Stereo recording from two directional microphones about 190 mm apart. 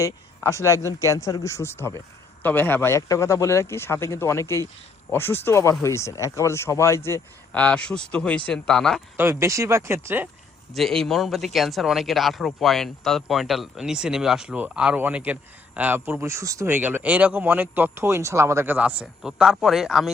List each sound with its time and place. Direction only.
0.0 s a man's voice: 15° left (ahead or behind)
9.1 s speech: 15° right (ahead or behind)
10.8 s speech: centre (ahead or behind)